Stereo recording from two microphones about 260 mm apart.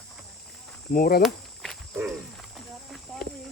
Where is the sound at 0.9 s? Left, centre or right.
Left.